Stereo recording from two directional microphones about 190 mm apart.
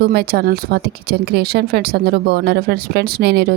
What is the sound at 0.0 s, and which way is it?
Speech, 55° right (ahead or behind).